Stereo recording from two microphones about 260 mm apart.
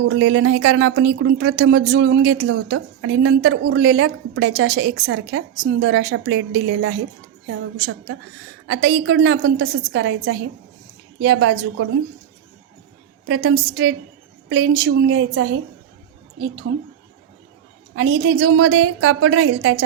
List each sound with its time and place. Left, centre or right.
0.1 s speech: right
13.2 s speech: right
17.9 s speech: right